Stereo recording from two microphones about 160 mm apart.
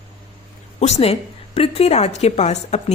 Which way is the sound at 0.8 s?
40° left (ahead or behind).